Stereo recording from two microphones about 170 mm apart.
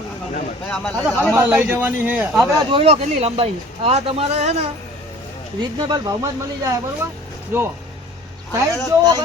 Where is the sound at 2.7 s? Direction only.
35° right (ahead or behind).